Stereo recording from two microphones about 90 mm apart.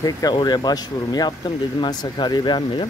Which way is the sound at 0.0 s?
50° left (ahead or behind).